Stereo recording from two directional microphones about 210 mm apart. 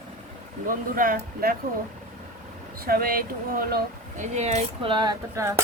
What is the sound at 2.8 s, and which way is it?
Speech, 45° right (ahead or behind).